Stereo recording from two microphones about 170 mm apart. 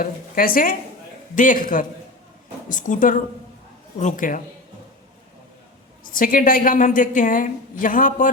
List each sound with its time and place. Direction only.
0.0 s a woman's voice: 55° left (ahead or behind)
6.1 s a woman's voice: 55° left (ahead or behind)